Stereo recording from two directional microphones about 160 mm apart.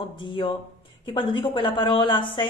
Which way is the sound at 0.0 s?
30° left (ahead or behind).